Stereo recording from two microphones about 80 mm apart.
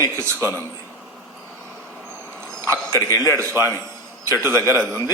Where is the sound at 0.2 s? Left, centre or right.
Right.